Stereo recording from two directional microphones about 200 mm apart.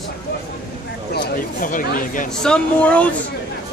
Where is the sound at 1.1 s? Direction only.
45° left (ahead or behind).